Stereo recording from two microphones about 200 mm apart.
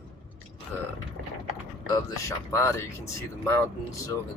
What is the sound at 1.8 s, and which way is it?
Speech, 15° left (ahead or behind).